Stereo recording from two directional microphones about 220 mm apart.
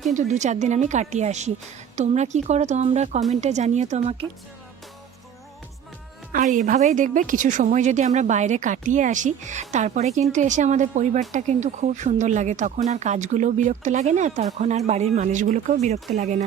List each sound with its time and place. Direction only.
0.1 s speech: 35° right (ahead or behind)
6.3 s speech: 35° right (ahead or behind)